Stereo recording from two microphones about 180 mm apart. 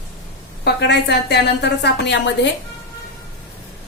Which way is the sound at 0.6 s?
70° left (ahead or behind).